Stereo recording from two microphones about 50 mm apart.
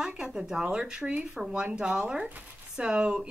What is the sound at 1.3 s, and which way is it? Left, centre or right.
Speech, centre.